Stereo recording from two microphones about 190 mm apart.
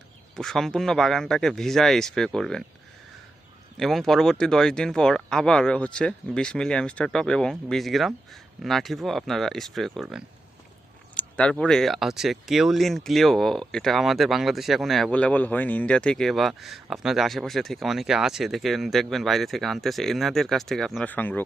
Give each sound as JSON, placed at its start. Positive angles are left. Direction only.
{"t": 0.3, "sound": "speech", "side_deg": 0}
{"t": 3.8, "sound": "speech", "side_deg": 0}
{"t": 11.1, "sound": "a sound", "side_deg": 5}
{"t": 11.6, "sound": "speech", "side_deg": 0}